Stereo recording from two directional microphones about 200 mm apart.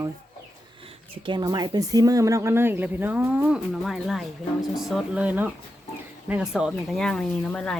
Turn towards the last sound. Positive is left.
turn(degrees=5)  # may be behind; listen again after turning